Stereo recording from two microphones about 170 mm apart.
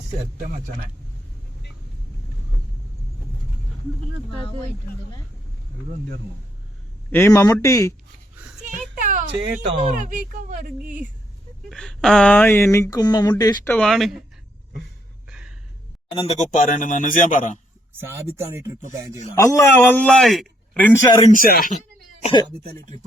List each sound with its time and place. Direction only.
0.3 s speech: 55° right (ahead or behind)
7.1 s a man's voice: 15° left (ahead or behind)
8.7 s a sound: 50° right (ahead or behind)
9.8 s speech: 50° right (ahead or behind)
11.7 s a man's voice: 5° left (ahead or behind); by 13.3 s 25° left (ahead or behind)
13.7 s speech: 5° left (ahead or behind)
15.3 s a sound: 5° right (ahead or behind)
16.1 s speech: 35° left (ahead or behind)
18.0 s speech: 15° right (ahead or behind)
19.4 s a man's voice: 15° left (ahead or behind)
21.3 s speech: 60° left (ahead or behind)
22.2 s speech: 30° left (ahead or behind)